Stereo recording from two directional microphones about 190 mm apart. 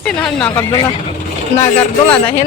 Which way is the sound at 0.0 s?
5° left (ahead or behind).